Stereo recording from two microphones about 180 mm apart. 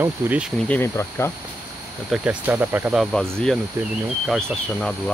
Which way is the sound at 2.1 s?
10° right (ahead or behind).